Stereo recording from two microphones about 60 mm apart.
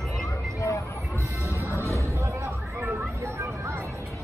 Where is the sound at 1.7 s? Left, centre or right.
Left.